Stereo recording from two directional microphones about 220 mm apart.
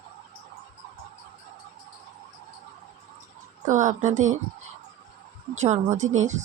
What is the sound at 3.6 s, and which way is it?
Speech, 35° right (ahead or behind).